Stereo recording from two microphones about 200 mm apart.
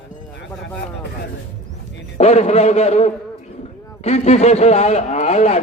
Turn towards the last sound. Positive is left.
turn(degrees=35)  # may be behind; listen again after turning